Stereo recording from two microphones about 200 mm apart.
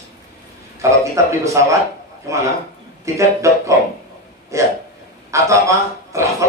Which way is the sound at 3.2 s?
15° right (ahead or behind).